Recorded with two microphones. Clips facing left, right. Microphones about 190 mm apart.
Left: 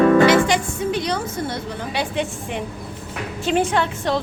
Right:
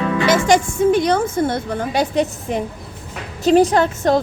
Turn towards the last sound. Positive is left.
turn(degrees=-45)  # may be behind; listen again after turning